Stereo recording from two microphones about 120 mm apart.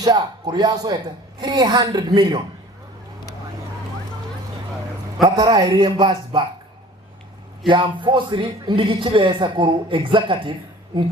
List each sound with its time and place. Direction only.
0.0 s a woman's voice: 35° right (ahead or behind)
5.2 s a woman's voice: 35° right (ahead or behind)
7.7 s a man's voice: 40° right (ahead or behind)